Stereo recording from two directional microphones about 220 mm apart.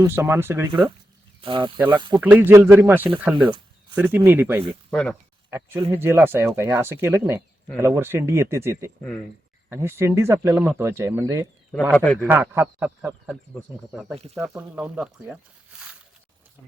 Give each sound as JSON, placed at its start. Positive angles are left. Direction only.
{"t": 0.0, "sound": "speech", "side_deg": -10}
{"t": 1.4, "sound": "speech", "side_deg": -25}
{"t": 2.2, "sound": "speech", "side_deg": -10}
{"t": 3.3, "sound": "speech", "side_deg": -25}
{"t": 3.9, "sound": "speech", "side_deg": -10}
{"t": 4.9, "sound": "speech", "side_deg": 5}
{"t": 5.5, "sound": "speech", "side_deg": -10}
{"t": 11.7, "sound": "speech", "side_deg": 5}
{"t": 12.2, "sound": "speech", "side_deg": -10}
{"t": 14.5, "sound": "speech", "side_deg": -5}